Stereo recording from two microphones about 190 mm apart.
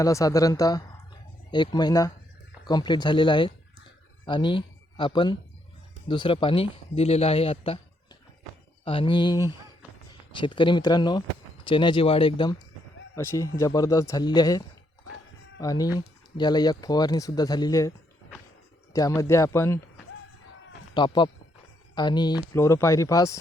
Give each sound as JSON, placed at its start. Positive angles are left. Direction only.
{"t": 0.0, "sound": "speech", "side_deg": 15}
{"t": 8.8, "sound": "speech", "side_deg": 30}
{"t": 13.1, "sound": "speech", "side_deg": 15}
{"t": 15.6, "sound": "speech", "side_deg": 20}
{"t": 18.9, "sound": "speech", "side_deg": 20}
{"t": 20.9, "sound": "speech", "side_deg": 25}